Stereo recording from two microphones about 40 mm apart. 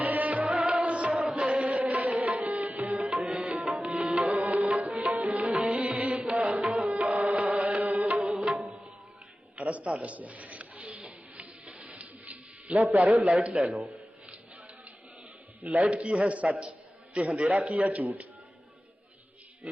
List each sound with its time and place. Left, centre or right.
0.0 s music: right
3.0 s tabla: right
3.8 s music: right
4.2 s music: right
9.6 s a sound: right
15.6 s speech: right
19.6 s speech: right